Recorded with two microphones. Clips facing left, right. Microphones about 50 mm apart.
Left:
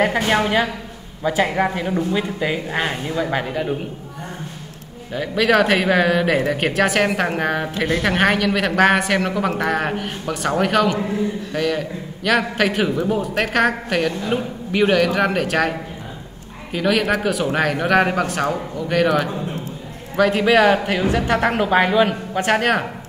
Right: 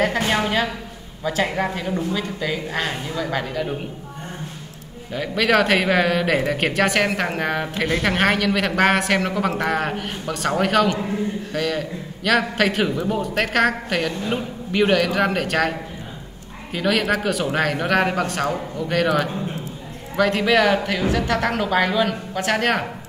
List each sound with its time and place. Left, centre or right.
0.3 s speech: centre
5.1 s a man's voice: centre
16.7 s a man's voice: centre
22.6 s speech: centre